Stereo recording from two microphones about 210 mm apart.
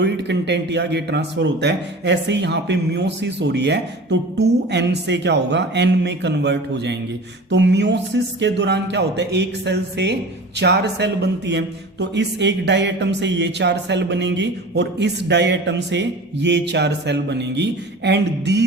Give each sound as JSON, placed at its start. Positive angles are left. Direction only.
{"t": 0.0, "sound": "speech", "side_deg": -55}